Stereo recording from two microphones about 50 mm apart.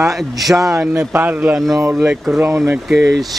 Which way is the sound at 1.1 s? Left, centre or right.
Right.